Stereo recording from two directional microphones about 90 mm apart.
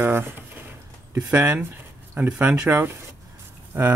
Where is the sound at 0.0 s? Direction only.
25° right (ahead or behind).